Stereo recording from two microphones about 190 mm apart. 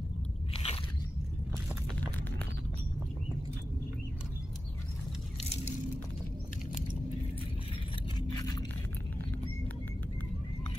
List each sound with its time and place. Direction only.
0.5 s biting: 30° left (ahead or behind)
8.3 s scrape: 20° left (ahead or behind)